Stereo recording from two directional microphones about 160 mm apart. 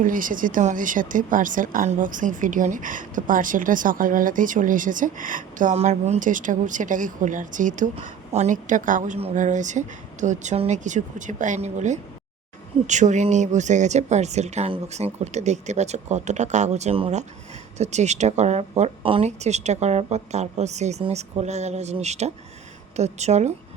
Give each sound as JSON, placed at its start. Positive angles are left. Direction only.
{"t": 0.0, "sound": "speech", "side_deg": -55}